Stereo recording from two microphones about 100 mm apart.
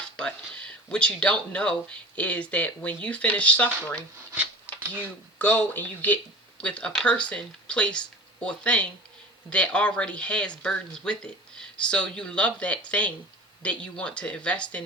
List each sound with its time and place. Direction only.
0.2 s speech: 10° left (ahead or behind)
5.4 s speech: 20° left (ahead or behind)